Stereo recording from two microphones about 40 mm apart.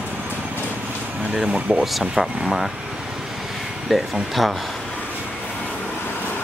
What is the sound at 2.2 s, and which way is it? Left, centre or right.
Speech, centre.